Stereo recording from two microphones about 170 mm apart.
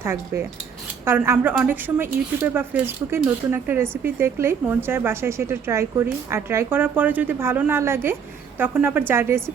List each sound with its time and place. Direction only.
0.0 s speech: 15° right (ahead or behind)